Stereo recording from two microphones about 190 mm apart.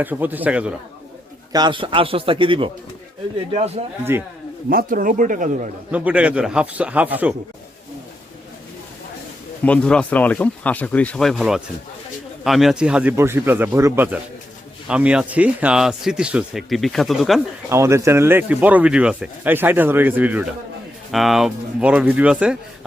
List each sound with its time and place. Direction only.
0.0 s speech: 10° right (ahead or behind)
1.5 s speech: 25° right (ahead or behind)
4.7 s speech: 50° right (ahead or behind)
5.9 s speech: 5° right (ahead or behind)
9.6 s speech: 5° left (ahead or behind)
17.7 s speech: 15° right (ahead or behind)